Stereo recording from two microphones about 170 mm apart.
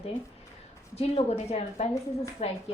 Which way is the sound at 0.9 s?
35° left (ahead or behind).